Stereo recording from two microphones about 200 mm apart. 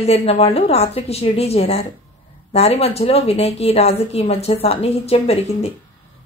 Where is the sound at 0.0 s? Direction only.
30° left (ahead or behind).